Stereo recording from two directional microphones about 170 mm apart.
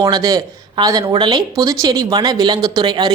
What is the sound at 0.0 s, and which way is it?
Speech, 20° right (ahead or behind).